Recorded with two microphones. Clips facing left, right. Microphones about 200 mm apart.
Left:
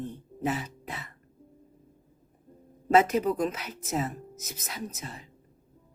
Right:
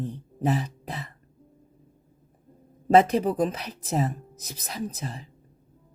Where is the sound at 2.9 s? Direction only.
35° right (ahead or behind).